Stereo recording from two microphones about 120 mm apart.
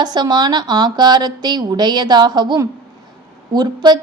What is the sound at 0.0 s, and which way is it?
A woman's voice, 35° right (ahead or behind).